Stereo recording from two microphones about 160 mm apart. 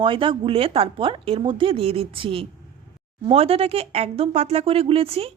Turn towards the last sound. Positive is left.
turn(degrees=-35)  # may be behind; listen again after turning